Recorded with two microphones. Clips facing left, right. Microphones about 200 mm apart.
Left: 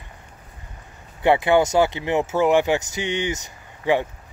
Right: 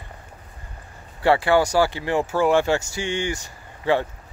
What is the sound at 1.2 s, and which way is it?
Speech, 20° left (ahead or behind).